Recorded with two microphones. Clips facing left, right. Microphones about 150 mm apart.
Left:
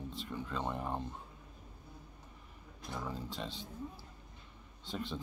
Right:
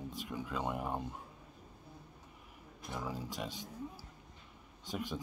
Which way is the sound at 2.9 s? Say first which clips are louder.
Right 1 dB; 10° right (ahead or behind).